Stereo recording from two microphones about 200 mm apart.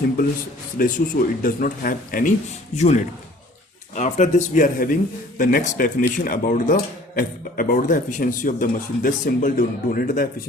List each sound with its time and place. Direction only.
0.8 s a man's voice: 40° left (ahead or behind)
2.7 s a man's voice: 35° left (ahead or behind)